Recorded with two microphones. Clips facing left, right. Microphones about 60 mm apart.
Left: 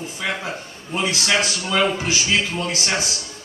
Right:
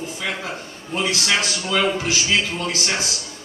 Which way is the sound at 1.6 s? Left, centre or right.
Centre.